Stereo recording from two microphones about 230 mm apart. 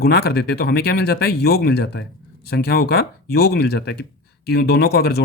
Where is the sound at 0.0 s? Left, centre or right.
Left.